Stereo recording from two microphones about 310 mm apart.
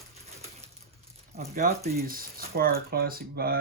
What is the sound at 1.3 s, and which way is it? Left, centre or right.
Speech, right.